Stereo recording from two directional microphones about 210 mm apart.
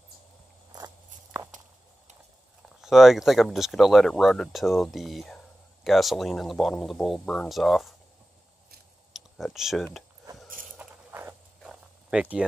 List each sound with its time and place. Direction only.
0.7 s walk: 15° right (ahead or behind)
2.8 s speech: centre (ahead or behind)
9.1 s speech: centre (ahead or behind)
10.8 s a sound: 10° right (ahead or behind)